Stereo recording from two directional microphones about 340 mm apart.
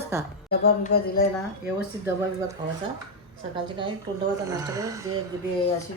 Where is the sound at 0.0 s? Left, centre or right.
Centre.